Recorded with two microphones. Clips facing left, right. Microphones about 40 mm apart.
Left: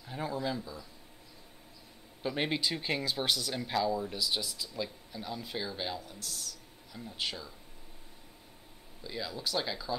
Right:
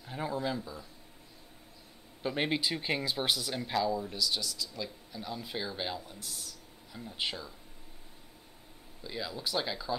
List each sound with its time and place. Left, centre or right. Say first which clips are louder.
0.0 s speech: right 1 dB; centre
2.2 s speech: right 1 dB; centre
9.0 s speech: even; centre